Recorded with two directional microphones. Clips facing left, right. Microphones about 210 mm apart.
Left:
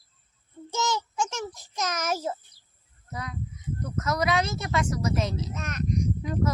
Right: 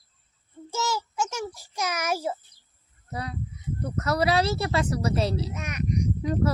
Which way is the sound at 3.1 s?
35° right (ahead or behind).